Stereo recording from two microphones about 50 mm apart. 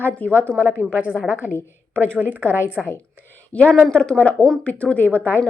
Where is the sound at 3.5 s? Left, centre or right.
Left.